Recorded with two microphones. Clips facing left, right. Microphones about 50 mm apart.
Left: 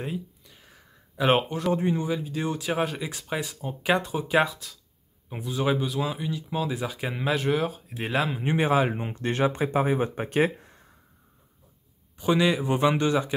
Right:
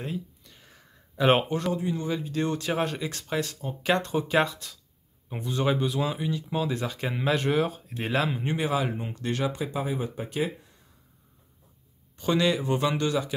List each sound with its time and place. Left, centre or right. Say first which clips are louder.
0.0 s a sound: left 1 dB; centre
1.7 s speech: left 4 dB; left
2.0 s speech: even; centre
8.5 s speech: left 6 dB; left
12.2 s speech: left 2 dB; centre